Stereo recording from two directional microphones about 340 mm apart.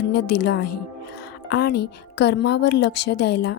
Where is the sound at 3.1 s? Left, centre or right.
Left.